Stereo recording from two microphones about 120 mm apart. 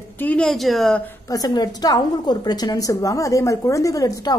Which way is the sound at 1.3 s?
35° left (ahead or behind).